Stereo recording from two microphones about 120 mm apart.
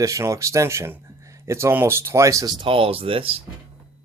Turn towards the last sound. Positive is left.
turn(degrees=-50)  # may be behind; listen again after turning